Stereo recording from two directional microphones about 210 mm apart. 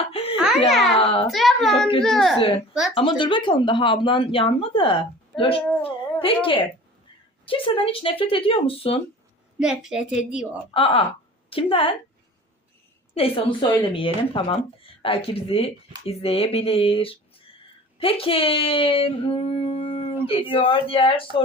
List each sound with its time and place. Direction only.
0.1 s music: 30° left (ahead or behind)
0.7 s a woman's voice: centre (ahead or behind)
0.9 s a sound: 25° left (ahead or behind)
1.3 s a woman's voice: centre (ahead or behind)
2.9 s a woman's voice: 25° left (ahead or behind)
9.6 s a woman's voice: 5° right (ahead or behind)
10.8 s speech: 25° left (ahead or behind)
13.1 s speech: 25° left (ahead or behind)